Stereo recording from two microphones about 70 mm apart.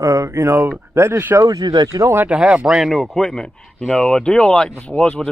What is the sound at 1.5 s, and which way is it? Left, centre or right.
Speech, right.